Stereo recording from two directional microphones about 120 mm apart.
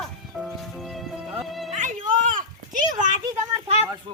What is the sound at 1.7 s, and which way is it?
Dog, 90° right.